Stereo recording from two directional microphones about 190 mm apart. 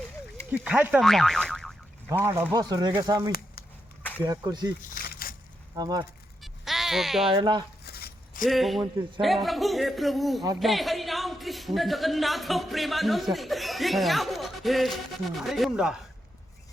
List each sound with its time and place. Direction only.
0.5 s speech: 5° right (ahead or behind)
2.0 s speech: 15° right (ahead or behind)
5.7 s speech: 20° right (ahead or behind)
6.4 s a sound: centre (ahead or behind)
7.3 s speech: 25° right (ahead or behind)
7.9 s a sound: 55° left (ahead or behind)
8.4 s speech: centre (ahead or behind)